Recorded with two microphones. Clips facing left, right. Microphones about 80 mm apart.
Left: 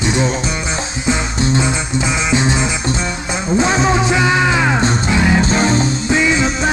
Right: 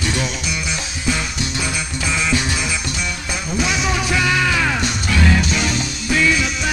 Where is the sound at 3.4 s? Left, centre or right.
Left.